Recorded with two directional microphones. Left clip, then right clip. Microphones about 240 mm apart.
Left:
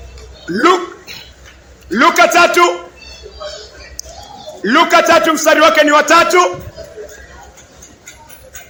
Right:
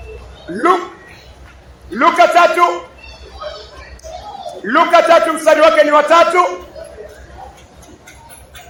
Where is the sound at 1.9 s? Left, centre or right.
Left.